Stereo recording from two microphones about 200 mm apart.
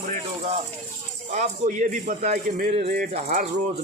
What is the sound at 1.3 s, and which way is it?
Speech, 35° right (ahead or behind).